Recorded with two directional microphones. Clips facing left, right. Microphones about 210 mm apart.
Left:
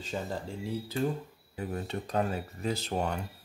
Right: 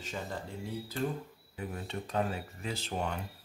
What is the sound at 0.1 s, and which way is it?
Speech, 30° left (ahead or behind).